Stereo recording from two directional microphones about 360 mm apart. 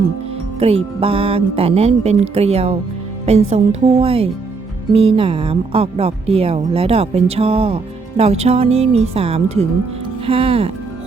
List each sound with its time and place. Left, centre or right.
0.6 s speech: centre